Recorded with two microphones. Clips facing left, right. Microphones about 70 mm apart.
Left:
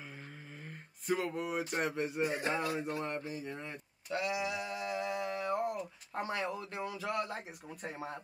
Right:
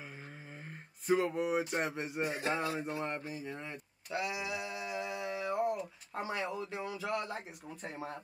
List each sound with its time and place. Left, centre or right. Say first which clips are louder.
1.0 s a sound: right 4 dB; centre
1.8 s speech: left 1 dB; right
2.2 s a man's voice: right 1 dB; centre